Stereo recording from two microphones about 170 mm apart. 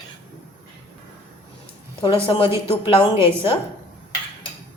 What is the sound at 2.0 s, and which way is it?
A woman's voice, 30° left (ahead or behind).